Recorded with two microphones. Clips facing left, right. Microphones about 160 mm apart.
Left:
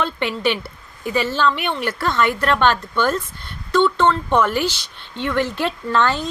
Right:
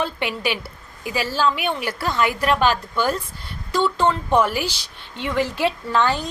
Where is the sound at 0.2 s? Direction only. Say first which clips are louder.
Left 4 dB; 10° right (ahead or behind).